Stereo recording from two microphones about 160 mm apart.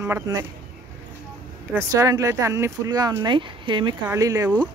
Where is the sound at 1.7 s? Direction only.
20° right (ahead or behind).